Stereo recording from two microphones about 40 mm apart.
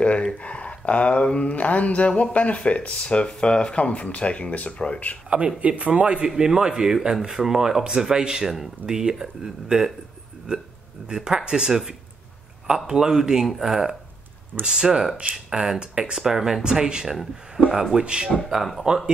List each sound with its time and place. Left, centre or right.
0.3 s speech: left
5.6 s speech: right
6.2 s speech: centre
17.1 s speech: centre
17.9 s speech: right
18.4 s speech: centre